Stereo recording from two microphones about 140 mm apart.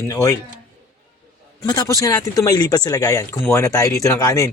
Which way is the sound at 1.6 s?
25° left (ahead or behind).